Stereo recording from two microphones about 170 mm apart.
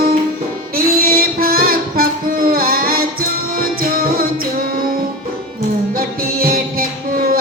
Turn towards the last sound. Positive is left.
turn(degrees=-60)  # may be behind; listen again after turning